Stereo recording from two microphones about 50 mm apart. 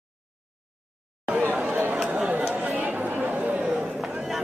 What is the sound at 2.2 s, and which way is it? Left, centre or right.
Chatter, right.